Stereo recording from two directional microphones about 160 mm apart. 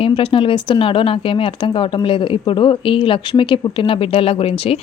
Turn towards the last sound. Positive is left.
turn(degrees=35)  # may be behind; listen again after turning